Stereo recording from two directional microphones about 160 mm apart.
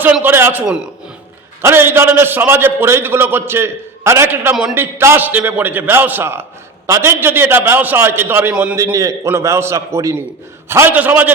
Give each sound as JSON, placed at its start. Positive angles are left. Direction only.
{"t": 0.0, "sound": "a man's voice", "side_deg": -10}